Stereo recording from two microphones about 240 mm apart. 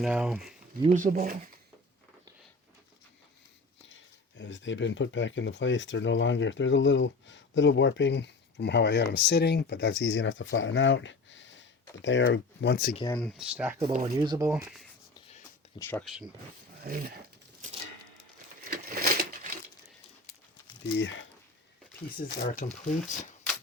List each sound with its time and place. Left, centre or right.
0.0 s speech: centre
0.8 s speech: right
1.0 s speech: right
3.8 s speech: left
13.1 s speech: centre
13.8 s speech: right
15.8 s speech: centre
16.8 s speech: right
18.7 s crushing: right
21.0 s speech: left
22.2 s speech: left